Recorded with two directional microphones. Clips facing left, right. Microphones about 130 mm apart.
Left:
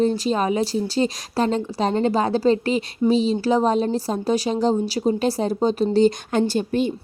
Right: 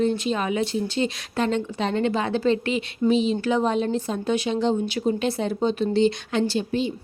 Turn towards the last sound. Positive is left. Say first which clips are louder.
# left 3 dB
turn(degrees=50)  # may be behind; listen again after turning